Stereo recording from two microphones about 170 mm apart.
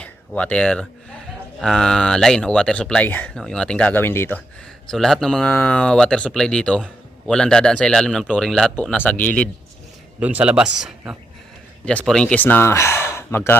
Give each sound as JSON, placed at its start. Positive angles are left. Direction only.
{"t": 0.0, "sound": "speech", "side_deg": 10}
{"t": 4.9, "sound": "speech", "side_deg": 0}
{"t": 10.2, "sound": "speech", "side_deg": -10}